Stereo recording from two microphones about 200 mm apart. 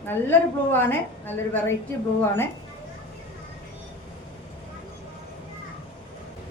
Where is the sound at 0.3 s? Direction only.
10° left (ahead or behind).